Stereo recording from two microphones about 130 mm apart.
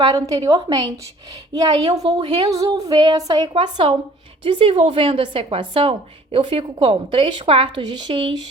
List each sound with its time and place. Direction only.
0.0 s a woman's voice: 30° right (ahead or behind)